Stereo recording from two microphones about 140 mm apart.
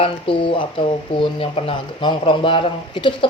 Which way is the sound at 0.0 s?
40° left (ahead or behind).